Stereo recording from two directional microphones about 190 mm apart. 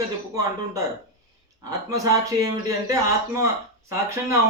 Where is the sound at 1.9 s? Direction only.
15° right (ahead or behind).